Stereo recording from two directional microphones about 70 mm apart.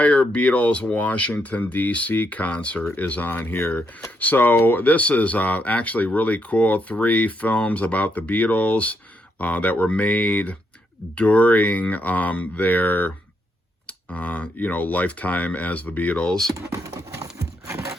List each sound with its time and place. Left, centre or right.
0.0 s speech: centre
16.5 s speech: right
17.3 s horse: right